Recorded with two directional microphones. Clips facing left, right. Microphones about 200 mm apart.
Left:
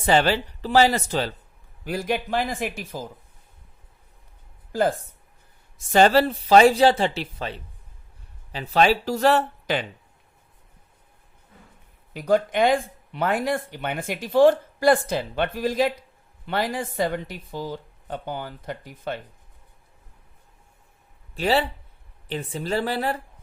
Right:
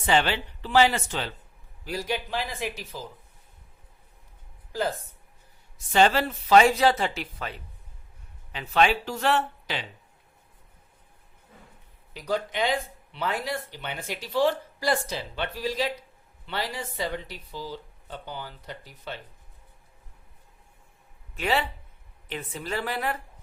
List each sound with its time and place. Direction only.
0.0 s speech: 40° left (ahead or behind)
1.8 s speech: 55° left (ahead or behind)
4.7 s speech: 50° left (ahead or behind)
5.9 s speech: 40° left (ahead or behind)
12.1 s speech: 50° left (ahead or behind)
21.3 s speech: 35° left (ahead or behind)